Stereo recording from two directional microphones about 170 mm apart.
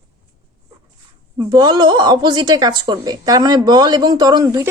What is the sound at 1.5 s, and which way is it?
Speech, 25° right (ahead or behind).